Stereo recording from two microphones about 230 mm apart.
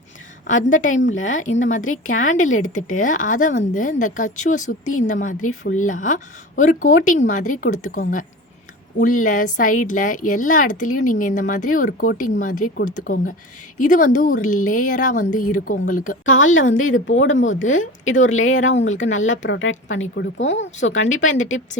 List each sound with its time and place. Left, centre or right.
0.4 s speech: left
1.4 s a woman's voice: left
16.2 s speech: left
16.5 s a woman's voice: left
17.3 s speech: left
18.2 s a woman's voice: left
19.2 s speech: left
21.2 s a woman's voice: left